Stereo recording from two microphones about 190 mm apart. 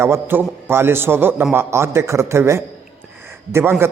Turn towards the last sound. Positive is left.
turn(degrees=-10)  # may be behind; listen again after turning